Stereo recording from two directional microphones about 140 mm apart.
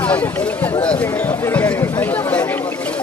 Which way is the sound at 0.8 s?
10° left (ahead or behind).